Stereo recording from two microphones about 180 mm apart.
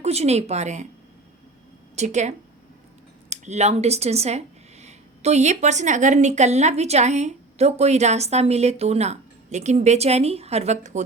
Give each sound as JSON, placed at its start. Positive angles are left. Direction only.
{"t": 0.0, "sound": "speech", "side_deg": -35}
{"t": 2.0, "sound": "speech", "side_deg": -40}